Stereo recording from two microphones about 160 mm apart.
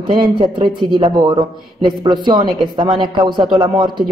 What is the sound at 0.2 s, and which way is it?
A man's voice, 30° right (ahead or behind).